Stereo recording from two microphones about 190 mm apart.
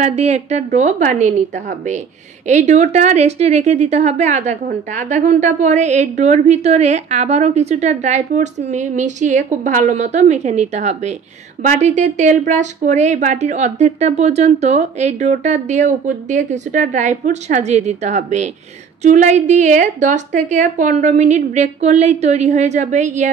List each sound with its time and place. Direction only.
0.0 s a woman's voice: 35° right (ahead or behind)